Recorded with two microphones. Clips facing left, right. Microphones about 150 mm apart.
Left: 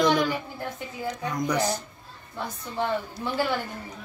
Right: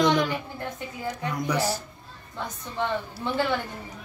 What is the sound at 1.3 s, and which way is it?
Speech, 5° right (ahead or behind).